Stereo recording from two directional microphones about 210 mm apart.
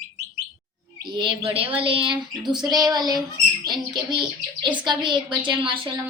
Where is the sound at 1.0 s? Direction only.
20° right (ahead or behind).